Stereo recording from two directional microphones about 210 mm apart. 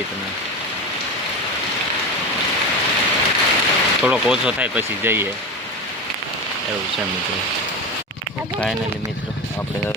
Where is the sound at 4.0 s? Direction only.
5° right (ahead or behind).